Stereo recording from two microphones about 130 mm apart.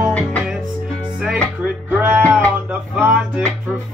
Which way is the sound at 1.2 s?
10° right (ahead or behind).